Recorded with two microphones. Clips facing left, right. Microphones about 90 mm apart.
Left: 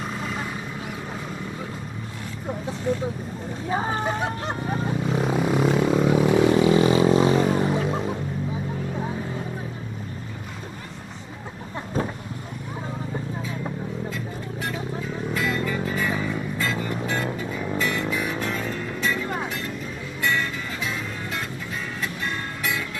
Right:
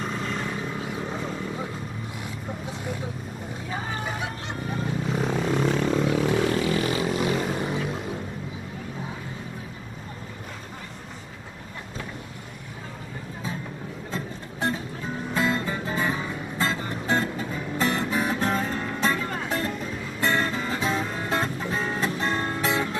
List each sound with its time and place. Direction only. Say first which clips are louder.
0.0 s vehicle: even; 5° left (ahead or behind)
3.7 s a sound: left 7 dB; 35° left (ahead or behind)
5.0 s vehicle: left 3 dB; 5° left (ahead or behind); by 7.4 s 25° left (ahead or behind)
14.1 s music: left 2 dB; 35° right (ahead or behind)
19.2 s music: left 2 dB; 15° left (ahead or behind)
20.2 s music: right 1 dB; 35° right (ahead or behind)